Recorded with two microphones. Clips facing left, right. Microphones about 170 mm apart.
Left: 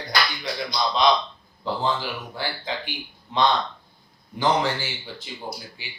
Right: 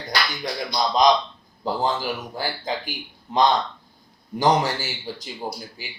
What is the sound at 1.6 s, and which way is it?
Speech, 40° right (ahead or behind).